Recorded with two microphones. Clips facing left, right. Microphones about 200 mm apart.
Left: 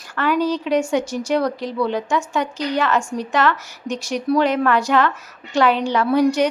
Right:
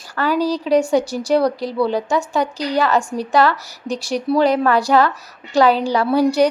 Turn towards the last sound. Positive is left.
turn(degrees=-35)  # may be behind; listen again after turning